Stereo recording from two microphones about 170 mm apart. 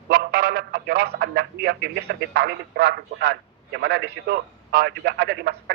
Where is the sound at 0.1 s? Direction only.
75° right (ahead or behind).